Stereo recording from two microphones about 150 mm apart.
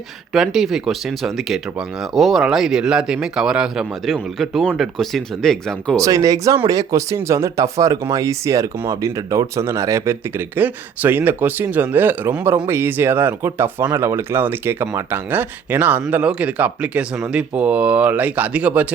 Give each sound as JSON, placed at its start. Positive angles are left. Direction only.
{"t": 0.3, "sound": "speech", "side_deg": 0}
{"t": 6.0, "sound": "speech", "side_deg": -25}